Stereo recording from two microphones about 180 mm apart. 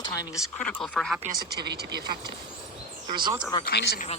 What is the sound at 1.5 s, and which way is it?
Speech, 65° right (ahead or behind).